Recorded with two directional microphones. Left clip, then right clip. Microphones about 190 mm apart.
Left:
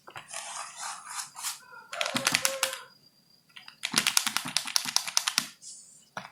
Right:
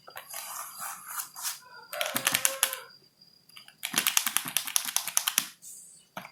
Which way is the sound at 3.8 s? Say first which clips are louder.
Left 2 dB; 5° right (ahead or behind).